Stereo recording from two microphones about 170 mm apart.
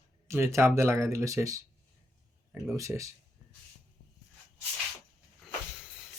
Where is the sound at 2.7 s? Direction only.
15° right (ahead or behind).